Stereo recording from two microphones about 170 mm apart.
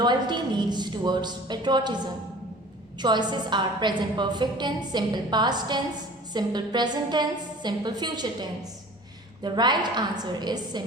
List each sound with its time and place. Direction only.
0.0 s a woman's voice: 25° right (ahead or behind)
3.0 s a woman's voice: 25° right (ahead or behind)